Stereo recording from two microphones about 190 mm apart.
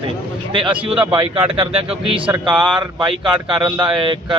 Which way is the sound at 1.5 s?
30° right (ahead or behind).